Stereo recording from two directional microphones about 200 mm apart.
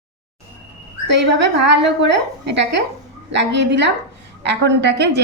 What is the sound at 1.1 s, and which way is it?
A woman's voice, 60° right (ahead or behind).